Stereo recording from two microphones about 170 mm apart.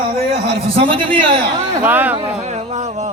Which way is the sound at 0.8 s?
30° right (ahead or behind).